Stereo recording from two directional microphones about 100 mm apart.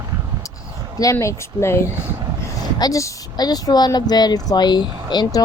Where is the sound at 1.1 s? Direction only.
30° left (ahead or behind).